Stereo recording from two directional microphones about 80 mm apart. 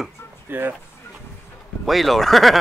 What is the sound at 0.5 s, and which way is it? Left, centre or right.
Speech, right.